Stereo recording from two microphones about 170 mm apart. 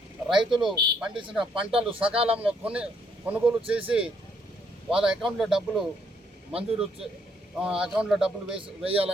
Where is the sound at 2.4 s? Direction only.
5° right (ahead or behind).